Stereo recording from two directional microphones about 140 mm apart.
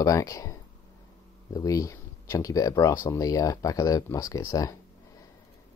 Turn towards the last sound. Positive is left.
turn(degrees=25)  # may be behind; listen again after turning